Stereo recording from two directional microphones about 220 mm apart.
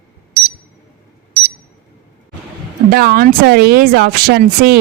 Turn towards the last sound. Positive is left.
turn(degrees=-45)  # may be behind; listen again after turning